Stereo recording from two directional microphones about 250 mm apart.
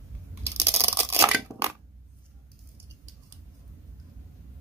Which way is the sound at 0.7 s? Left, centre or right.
Centre.